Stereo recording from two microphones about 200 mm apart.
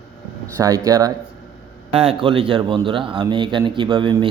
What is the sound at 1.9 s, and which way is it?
A man's voice, 30° right (ahead or behind).